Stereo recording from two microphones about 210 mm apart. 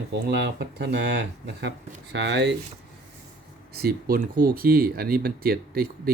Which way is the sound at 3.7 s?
45° right (ahead or behind).